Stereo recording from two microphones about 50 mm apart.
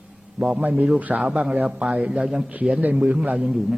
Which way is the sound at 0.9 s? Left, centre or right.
Right.